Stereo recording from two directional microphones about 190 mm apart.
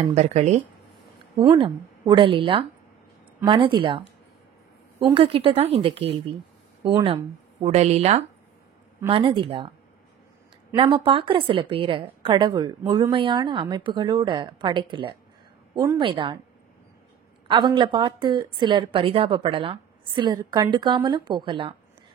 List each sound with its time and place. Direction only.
0.0 s speech: 35° right (ahead or behind)
1.4 s a woman's voice: 25° right (ahead or behind)
5.0 s a woman's voice: 30° right (ahead or behind)
10.8 s a woman's voice: 25° right (ahead or behind)
17.5 s a woman's voice: 25° right (ahead or behind)